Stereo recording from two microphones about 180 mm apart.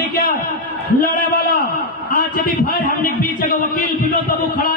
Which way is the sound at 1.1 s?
55° left (ahead or behind).